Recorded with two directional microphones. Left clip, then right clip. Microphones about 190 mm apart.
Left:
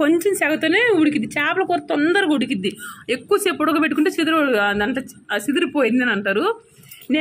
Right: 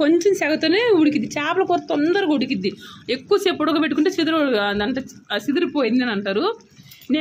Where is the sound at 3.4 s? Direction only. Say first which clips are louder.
Left 1 dB; 15° right (ahead or behind).